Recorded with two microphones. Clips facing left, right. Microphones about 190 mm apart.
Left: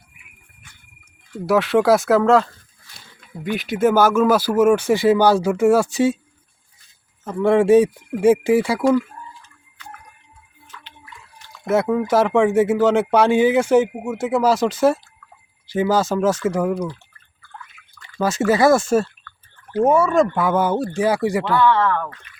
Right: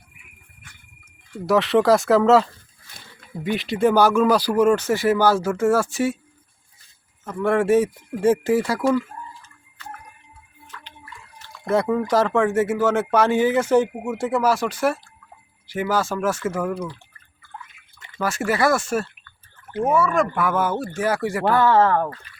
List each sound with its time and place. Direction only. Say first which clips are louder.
1.5 s speech: left 1 dB; centre (ahead or behind); by 6.1 s 15° left (ahead or behind)
7.3 s speech: left 4 dB; 15° left (ahead or behind)
11.6 s speech: left 2 dB; 5° left (ahead or behind)
14.4 s speech: left 6 dB; 20° left (ahead or behind)
17.9 s a sound: even; 20° right (ahead or behind)
18.2 s speech: left 5 dB; 20° left (ahead or behind)
21.5 s speech: right 2 dB; 40° right (ahead or behind)